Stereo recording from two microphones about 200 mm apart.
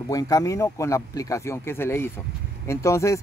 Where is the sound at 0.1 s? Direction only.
15° left (ahead or behind).